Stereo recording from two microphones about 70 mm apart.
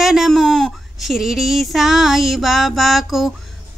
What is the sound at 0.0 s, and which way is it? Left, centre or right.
Speech, centre.